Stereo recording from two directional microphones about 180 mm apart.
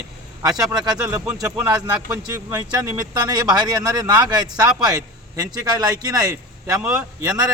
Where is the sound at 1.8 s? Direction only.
20° right (ahead or behind).